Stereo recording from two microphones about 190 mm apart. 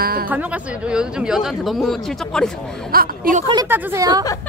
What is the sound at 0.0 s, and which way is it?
Speech, 50° right (ahead or behind).